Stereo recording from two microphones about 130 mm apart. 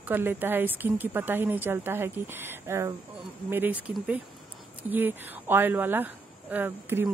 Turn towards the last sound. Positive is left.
turn(degrees=-15)  # may be behind; listen again after turning